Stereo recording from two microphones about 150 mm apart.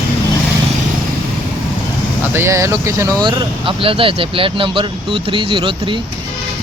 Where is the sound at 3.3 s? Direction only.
35° right (ahead or behind).